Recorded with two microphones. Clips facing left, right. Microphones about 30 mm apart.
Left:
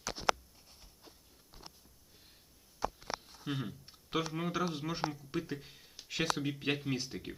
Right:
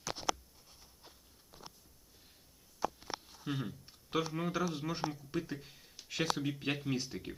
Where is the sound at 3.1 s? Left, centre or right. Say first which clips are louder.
Left 2 dB; left.